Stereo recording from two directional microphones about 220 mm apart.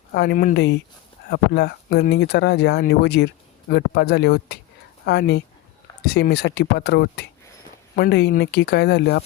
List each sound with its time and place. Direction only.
0.1 s speech: 45° left (ahead or behind)